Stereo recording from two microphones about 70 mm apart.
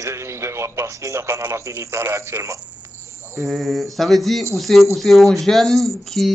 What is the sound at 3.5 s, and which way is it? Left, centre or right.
Speech, centre.